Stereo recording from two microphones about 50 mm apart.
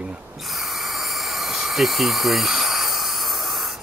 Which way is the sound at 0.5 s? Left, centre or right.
Centre.